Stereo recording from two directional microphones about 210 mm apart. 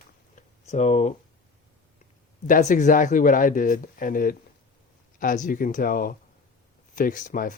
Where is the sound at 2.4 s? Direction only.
40° left (ahead or behind).